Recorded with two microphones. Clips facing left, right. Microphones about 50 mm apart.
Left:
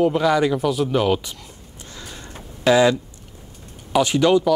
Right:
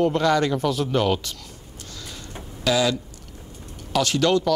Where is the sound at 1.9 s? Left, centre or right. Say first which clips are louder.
Left 2 dB; left.